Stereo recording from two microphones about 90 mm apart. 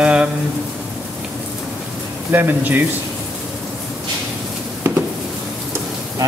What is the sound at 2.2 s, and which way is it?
Speech, 20° right (ahead or behind).